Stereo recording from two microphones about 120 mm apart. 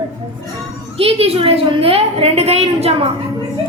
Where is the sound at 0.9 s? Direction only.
55° right (ahead or behind).